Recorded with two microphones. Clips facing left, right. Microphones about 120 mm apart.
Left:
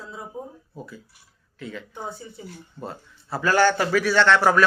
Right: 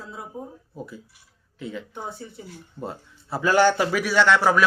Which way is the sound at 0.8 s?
20° right (ahead or behind).